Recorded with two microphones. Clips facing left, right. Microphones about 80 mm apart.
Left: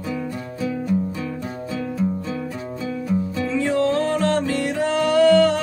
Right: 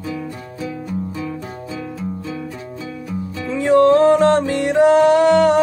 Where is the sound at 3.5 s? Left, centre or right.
Right.